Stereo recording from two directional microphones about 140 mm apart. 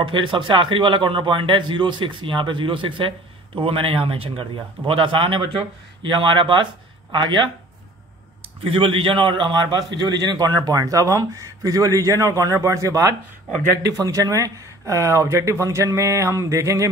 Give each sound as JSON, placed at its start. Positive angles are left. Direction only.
{"t": 0.1, "sound": "a man's voice", "side_deg": -35}
{"t": 8.6, "sound": "a man's voice", "side_deg": -40}